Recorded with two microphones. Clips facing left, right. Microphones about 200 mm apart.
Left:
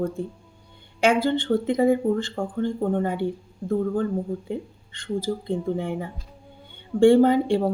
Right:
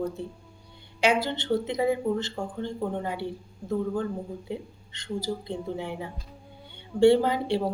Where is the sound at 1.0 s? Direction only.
50° left (ahead or behind).